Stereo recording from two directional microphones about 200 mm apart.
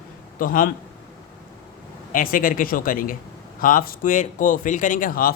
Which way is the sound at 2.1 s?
40° left (ahead or behind).